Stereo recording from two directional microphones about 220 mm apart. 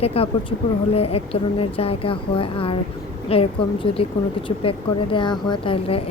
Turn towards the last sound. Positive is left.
turn(degrees=25)  # may be behind; listen again after turning